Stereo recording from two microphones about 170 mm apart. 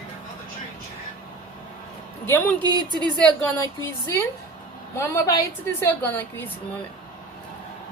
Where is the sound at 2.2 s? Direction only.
15° left (ahead or behind).